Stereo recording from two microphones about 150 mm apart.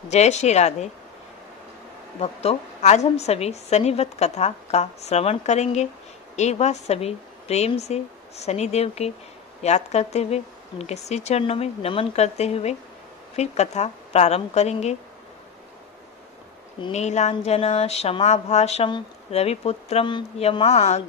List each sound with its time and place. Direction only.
0.1 s a woman's voice: 50° left (ahead or behind)
2.1 s a woman's voice: 45° left (ahead or behind)
16.9 s a woman's voice: 50° left (ahead or behind)